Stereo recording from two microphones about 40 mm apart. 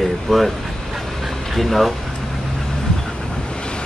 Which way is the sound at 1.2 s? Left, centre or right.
Centre.